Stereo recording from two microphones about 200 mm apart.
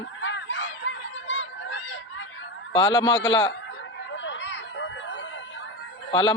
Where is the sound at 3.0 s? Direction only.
65° left (ahead or behind).